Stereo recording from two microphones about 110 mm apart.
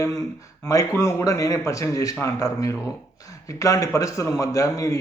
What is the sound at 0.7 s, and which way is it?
Speech, 30° left (ahead or behind).